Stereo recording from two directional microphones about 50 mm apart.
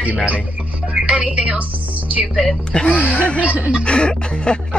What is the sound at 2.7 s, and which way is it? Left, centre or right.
Music, centre.